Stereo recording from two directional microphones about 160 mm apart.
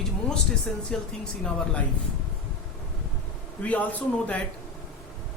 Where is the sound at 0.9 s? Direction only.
5° left (ahead or behind).